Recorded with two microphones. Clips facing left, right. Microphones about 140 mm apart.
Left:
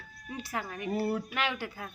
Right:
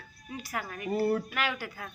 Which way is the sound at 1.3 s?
25° left (ahead or behind).